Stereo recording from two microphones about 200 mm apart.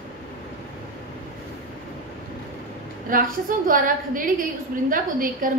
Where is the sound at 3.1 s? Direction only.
45° right (ahead or behind).